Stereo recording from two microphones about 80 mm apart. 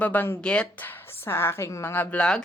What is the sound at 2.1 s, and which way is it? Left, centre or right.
Speech, centre.